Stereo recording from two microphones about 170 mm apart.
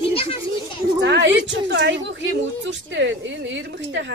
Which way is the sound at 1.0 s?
90° right.